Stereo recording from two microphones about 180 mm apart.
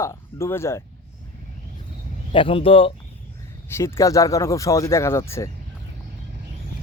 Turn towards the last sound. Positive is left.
turn(degrees=15)  # may be behind; listen again after turning